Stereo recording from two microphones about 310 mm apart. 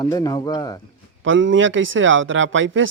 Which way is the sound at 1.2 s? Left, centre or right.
Right.